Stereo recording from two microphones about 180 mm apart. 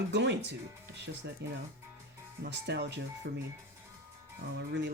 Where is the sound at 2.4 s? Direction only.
70° right (ahead or behind).